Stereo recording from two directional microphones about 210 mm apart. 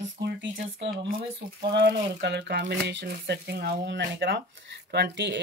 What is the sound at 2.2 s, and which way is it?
Speech, 55° right (ahead or behind).